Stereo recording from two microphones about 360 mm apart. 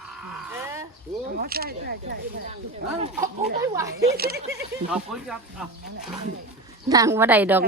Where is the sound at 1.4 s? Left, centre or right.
Right.